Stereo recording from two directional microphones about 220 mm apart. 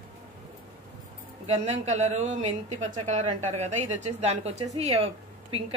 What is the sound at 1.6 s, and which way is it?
A woman's voice, 30° right (ahead or behind).